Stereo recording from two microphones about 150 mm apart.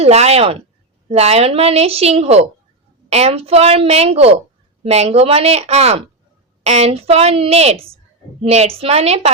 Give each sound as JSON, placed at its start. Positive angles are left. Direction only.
{"t": 0.0, "sound": "a woman's voice", "side_deg": -45}